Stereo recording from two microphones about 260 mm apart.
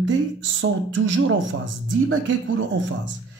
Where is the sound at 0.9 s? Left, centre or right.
Right.